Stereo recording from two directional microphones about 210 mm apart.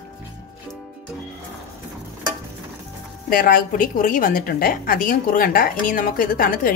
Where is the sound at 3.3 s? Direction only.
40° left (ahead or behind).